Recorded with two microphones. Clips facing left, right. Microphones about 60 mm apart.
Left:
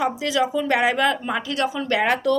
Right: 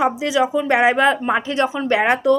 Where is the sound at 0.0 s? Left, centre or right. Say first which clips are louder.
Right 4 dB; right.